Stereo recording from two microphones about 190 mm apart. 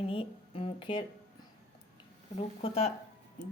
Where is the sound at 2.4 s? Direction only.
35° left (ahead or behind).